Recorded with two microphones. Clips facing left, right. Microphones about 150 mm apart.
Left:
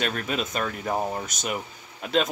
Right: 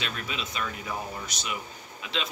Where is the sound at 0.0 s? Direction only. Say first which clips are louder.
Left 7 dB; 50° left (ahead or behind).